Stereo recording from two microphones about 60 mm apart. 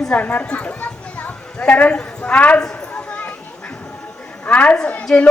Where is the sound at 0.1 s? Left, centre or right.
Left.